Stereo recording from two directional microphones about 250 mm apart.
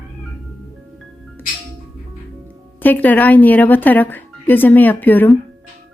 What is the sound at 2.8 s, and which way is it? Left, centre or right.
Speech, centre.